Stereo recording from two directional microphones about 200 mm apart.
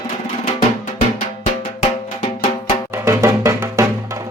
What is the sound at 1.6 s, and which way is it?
Music, 35° left (ahead or behind).